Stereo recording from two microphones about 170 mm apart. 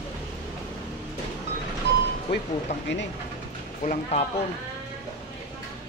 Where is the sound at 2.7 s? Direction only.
40° left (ahead or behind).